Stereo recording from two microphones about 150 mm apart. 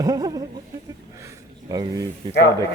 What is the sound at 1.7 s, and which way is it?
Speech, 25° right (ahead or behind).